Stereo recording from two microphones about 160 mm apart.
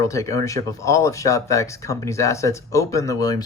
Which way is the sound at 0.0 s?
20° left (ahead or behind).